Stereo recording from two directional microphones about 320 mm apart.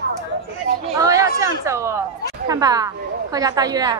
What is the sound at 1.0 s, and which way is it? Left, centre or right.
A woman's voice, centre.